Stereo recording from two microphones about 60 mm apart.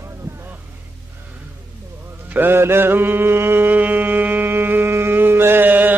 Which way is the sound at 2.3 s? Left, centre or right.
Right.